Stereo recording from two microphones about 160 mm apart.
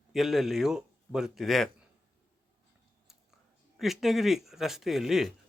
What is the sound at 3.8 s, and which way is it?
Speech, centre (ahead or behind).